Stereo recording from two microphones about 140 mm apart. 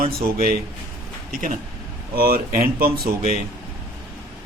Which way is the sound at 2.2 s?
90° right.